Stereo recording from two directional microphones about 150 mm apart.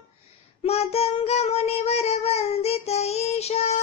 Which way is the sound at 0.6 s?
45° left (ahead or behind).